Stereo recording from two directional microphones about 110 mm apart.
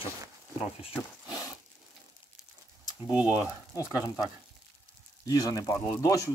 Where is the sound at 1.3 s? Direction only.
30° left (ahead or behind).